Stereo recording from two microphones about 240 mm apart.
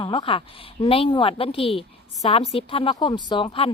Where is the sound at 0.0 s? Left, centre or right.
Left.